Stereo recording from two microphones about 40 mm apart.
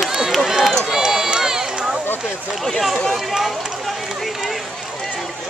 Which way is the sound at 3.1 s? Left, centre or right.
Centre.